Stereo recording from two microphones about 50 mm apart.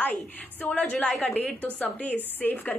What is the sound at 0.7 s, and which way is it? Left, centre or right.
A woman's voice, left.